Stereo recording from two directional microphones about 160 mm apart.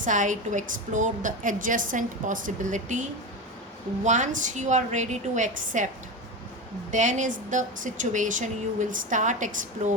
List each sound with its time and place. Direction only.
0.0 s a woman's voice: 50° right (ahead or behind)
6.9 s a woman's voice: 50° right (ahead or behind)